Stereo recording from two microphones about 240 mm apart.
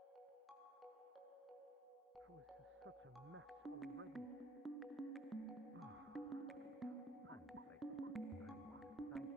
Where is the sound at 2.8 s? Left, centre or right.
Right.